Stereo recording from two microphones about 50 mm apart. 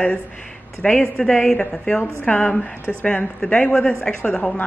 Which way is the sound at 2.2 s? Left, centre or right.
Left.